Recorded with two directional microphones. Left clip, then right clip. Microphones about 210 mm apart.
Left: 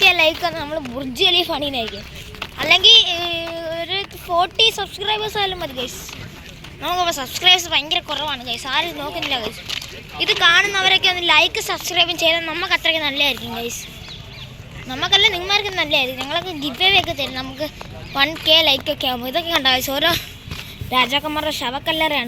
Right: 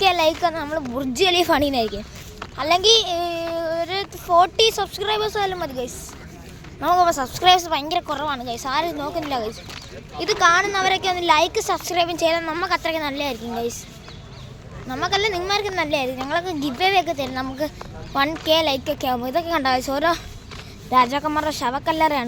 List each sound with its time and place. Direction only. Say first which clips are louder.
0.0 s a woman's voice: left 3 dB; 10° right (ahead or behind)
0.9 s speech: left 2 dB; 15° right (ahead or behind)
1.5 s a woman's voice: right 3 dB; 35° right (ahead or behind)
2.6 s a woman's voice: left 5 dB; 15° right (ahead or behind)
6.8 s a woman's voice: right 3 dB; 25° right (ahead or behind); by 13.3 s 10° right (ahead or behind)
14.8 s speech: left 6 dB; 5° right (ahead or behind)